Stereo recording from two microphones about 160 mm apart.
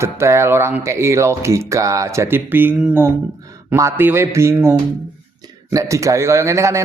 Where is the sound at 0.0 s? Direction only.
15° right (ahead or behind).